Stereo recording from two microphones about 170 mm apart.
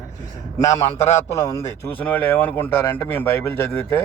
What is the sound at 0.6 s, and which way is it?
A man's voice, 20° left (ahead or behind).